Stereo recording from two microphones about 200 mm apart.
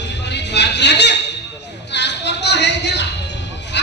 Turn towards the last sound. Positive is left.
turn(degrees=60)  # may be behind; listen again after turning